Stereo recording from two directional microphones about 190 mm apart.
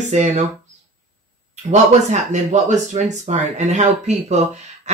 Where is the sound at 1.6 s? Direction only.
40° right (ahead or behind).